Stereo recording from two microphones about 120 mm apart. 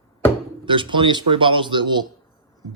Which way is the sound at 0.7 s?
40° right (ahead or behind).